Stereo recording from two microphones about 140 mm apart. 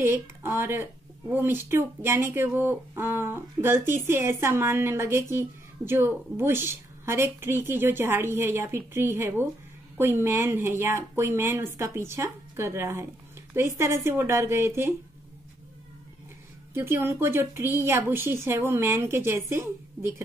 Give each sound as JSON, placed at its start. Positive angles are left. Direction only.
{"t": 0.0, "sound": "speech", "side_deg": -15}
{"t": 16.7, "sound": "speech", "side_deg": -15}